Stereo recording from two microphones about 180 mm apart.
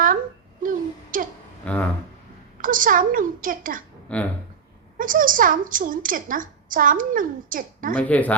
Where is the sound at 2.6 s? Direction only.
50° right (ahead or behind).